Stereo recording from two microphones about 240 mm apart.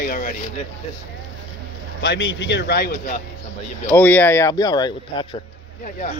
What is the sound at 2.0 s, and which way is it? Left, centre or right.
A man's voice, left.